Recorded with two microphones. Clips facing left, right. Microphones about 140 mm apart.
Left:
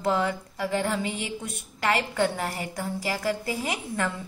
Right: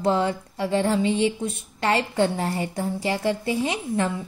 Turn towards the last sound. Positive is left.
turn(degrees=-25)  # may be behind; listen again after turning